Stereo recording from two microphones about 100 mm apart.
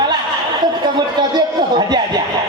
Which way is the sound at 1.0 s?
45° right (ahead or behind).